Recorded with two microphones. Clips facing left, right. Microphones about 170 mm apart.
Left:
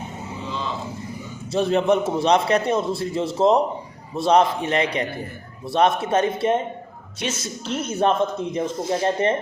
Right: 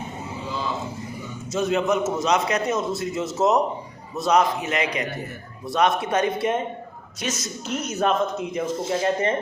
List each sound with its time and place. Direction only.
1.5 s a man's voice: 35° left (ahead or behind)